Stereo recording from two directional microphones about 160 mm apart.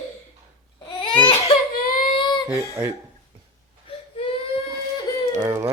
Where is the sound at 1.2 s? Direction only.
35° left (ahead or behind).